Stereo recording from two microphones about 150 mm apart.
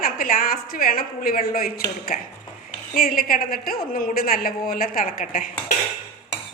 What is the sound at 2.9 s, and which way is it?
A woman's voice, 75° left (ahead or behind).